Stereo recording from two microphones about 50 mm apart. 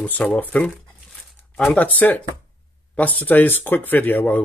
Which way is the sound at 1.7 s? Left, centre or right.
Left.